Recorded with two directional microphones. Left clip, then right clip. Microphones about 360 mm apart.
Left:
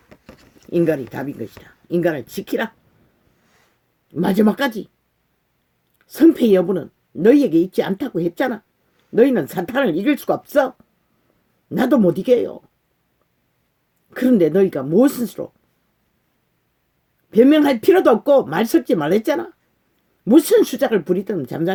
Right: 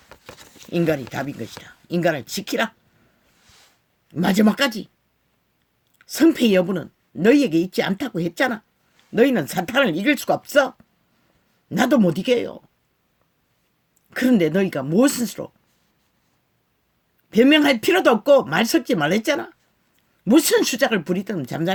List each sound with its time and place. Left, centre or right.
0.6 s speech: right
4.1 s speech: right
6.0 s speech: right
11.7 s speech: right
14.1 s speech: right
17.2 s speech: right